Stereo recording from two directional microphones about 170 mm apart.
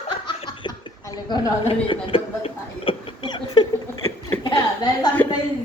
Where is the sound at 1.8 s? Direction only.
30° left (ahead or behind).